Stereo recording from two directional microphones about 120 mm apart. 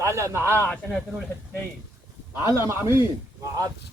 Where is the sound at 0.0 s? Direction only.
25° right (ahead or behind).